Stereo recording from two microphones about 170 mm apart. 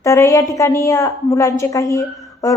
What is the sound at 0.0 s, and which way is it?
A woman's voice, 15° left (ahead or behind).